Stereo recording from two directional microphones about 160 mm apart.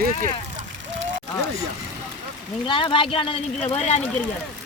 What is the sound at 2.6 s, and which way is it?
Speech, 30° left (ahead or behind).